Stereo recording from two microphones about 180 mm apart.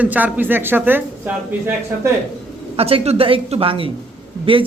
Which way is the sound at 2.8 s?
35° right (ahead or behind).